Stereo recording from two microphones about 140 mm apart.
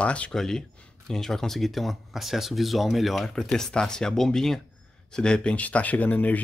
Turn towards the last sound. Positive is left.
turn(degrees=10)  # may be behind; listen again after turning